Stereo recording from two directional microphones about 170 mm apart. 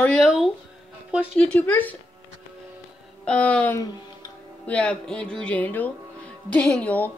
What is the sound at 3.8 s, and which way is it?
Music, 20° left (ahead or behind).